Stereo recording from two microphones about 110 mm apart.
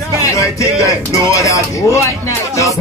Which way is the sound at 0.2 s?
30° left (ahead or behind).